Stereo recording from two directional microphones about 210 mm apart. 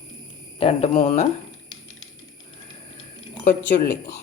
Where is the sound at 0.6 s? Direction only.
25° left (ahead or behind).